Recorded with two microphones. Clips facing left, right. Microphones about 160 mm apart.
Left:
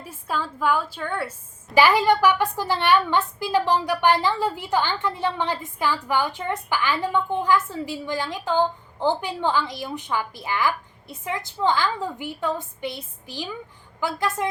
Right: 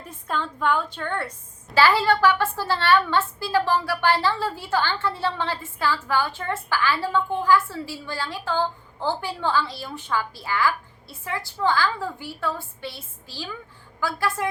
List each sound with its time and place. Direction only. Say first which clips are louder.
0.0 s a woman's voice: even; 5° left (ahead or behind)
1.7 s a woman's voice: left 2 dB; 15° left (ahead or behind)